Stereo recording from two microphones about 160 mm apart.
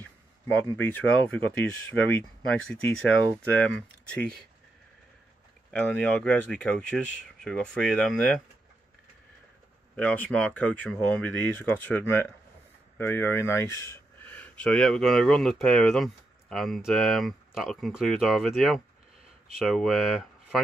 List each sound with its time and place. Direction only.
0.0 s speech: 10° left (ahead or behind)
5.7 s speech: 10° left (ahead or behind)
9.9 s speech: 10° left (ahead or behind)